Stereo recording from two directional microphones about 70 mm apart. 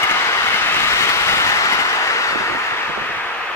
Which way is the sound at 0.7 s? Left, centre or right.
Left.